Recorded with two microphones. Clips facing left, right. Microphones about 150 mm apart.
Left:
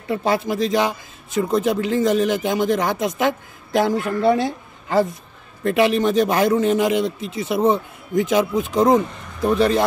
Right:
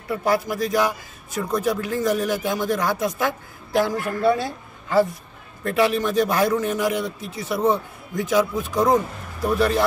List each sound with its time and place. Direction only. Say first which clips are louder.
0.2 s a man's voice: left 1 dB; 25° left (ahead or behind)